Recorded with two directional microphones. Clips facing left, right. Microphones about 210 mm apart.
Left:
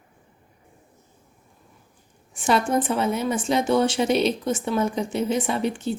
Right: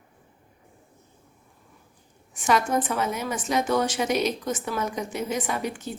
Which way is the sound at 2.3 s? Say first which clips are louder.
Left 2 dB; 30° left (ahead or behind).